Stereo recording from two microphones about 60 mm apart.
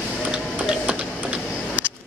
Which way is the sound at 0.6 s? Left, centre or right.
Right.